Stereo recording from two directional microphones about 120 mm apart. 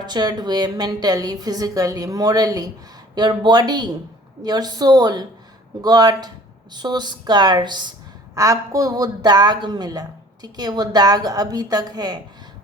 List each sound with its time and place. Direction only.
0.0 s speech: 35° right (ahead or behind)
8.4 s speech: 25° right (ahead or behind)